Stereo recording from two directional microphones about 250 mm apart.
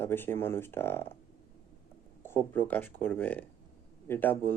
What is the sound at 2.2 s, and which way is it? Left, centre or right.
Speech, centre.